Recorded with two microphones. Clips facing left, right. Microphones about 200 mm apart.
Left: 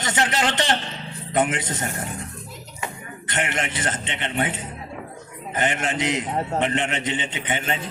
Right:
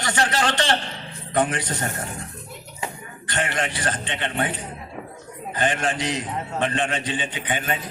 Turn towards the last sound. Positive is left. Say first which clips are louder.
# even
turn(degrees=25)  # may be behind; listen again after turning